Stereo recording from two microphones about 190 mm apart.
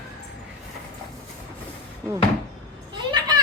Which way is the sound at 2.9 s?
25° right (ahead or behind).